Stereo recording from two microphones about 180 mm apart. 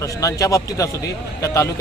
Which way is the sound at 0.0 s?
20° left (ahead or behind).